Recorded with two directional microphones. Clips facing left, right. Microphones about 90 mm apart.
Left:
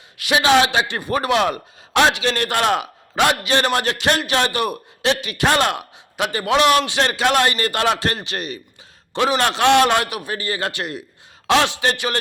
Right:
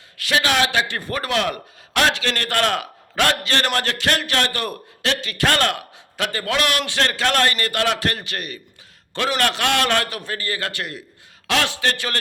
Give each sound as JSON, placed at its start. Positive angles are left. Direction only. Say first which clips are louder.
{"t": 0.2, "sound": "speech", "louder": "left 4 dB", "side_deg": 15}